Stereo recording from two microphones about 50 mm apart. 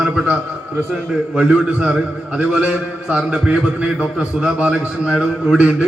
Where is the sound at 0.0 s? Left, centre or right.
Centre.